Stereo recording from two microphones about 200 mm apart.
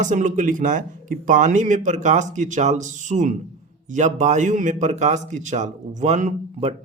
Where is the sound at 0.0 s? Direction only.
40° right (ahead or behind).